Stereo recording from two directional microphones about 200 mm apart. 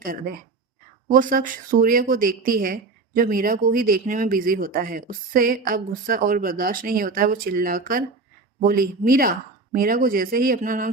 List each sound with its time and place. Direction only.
0.0 s speech: 45° right (ahead or behind)